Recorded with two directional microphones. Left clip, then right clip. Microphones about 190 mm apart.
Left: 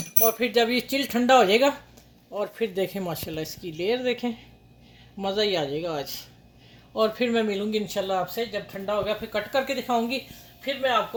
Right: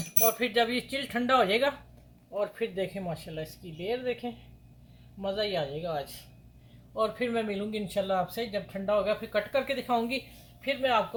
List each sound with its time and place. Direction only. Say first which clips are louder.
0.2 s speech: left 4 dB; 50° left (ahead or behind)
2.3 s speech: left 4 dB; 55° left (ahead or behind); by 10.2 s 25° left (ahead or behind)